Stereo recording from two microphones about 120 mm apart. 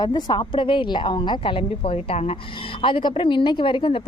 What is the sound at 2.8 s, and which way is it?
Speech, 45° left (ahead or behind).